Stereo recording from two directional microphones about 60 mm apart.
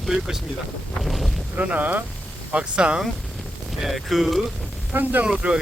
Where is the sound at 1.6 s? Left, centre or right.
Right.